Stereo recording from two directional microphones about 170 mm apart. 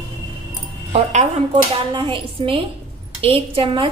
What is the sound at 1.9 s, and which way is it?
A woman's voice, 30° right (ahead or behind).